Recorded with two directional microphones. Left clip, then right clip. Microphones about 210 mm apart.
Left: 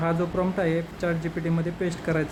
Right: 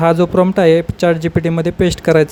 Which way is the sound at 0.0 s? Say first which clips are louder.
Right 14 dB; 40° right (ahead or behind).